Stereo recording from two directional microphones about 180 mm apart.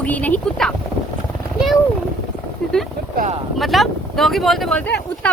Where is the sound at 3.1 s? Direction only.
45° right (ahead or behind).